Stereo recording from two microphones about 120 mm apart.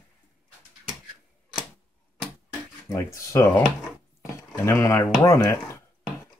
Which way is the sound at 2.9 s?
25° left (ahead or behind).